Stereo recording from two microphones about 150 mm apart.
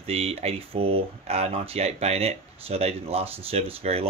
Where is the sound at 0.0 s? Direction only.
40° right (ahead or behind).